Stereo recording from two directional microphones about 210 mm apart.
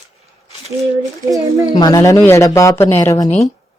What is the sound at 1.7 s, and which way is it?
Speech, 20° left (ahead or behind).